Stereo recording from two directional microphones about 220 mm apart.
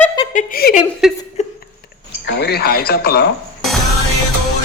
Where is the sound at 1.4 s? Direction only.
30° left (ahead or behind).